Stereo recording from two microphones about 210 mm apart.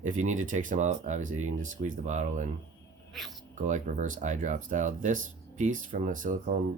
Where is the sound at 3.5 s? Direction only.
35° right (ahead or behind).